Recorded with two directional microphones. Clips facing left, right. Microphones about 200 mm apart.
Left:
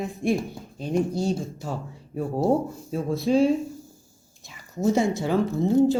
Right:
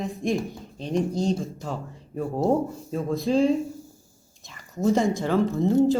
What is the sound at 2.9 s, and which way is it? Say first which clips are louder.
Speech: left 1 dB; 5° left (ahead or behind).